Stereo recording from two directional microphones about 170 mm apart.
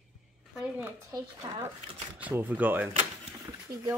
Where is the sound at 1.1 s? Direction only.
20° right (ahead or behind).